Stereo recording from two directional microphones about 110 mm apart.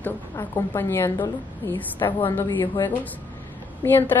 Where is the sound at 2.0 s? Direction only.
50° left (ahead or behind).